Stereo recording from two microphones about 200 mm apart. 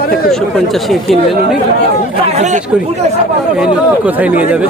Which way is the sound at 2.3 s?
35° right (ahead or behind).